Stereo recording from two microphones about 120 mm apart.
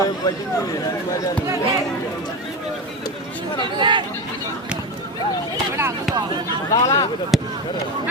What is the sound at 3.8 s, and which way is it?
Speech, 40° right (ahead or behind).